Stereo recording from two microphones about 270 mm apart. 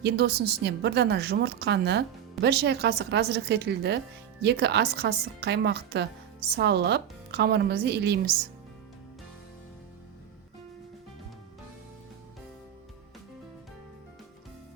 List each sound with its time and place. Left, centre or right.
0.0 s speech: right